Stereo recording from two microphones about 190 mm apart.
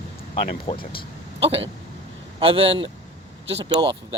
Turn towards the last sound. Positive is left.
turn(degrees=-25)  # may be behind; listen again after turning